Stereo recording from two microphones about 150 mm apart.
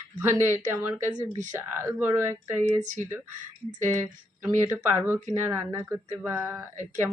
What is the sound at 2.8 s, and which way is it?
Speech, 55° right (ahead or behind).